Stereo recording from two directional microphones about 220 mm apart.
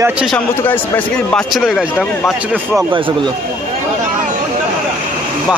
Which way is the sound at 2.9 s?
20° right (ahead or behind).